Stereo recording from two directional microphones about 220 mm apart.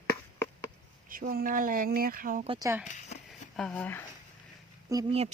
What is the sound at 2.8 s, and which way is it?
Speech, 35° left (ahead or behind).